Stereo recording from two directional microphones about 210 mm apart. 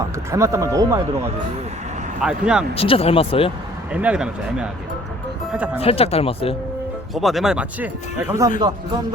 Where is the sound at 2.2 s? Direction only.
5° right (ahead or behind).